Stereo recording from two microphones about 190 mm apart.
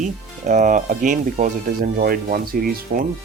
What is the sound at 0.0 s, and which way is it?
Speech, 40° right (ahead or behind).